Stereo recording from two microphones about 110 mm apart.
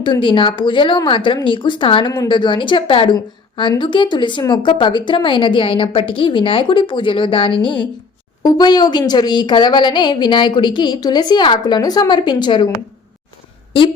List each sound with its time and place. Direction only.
0.0 s a woman's voice: 45° left (ahead or behind)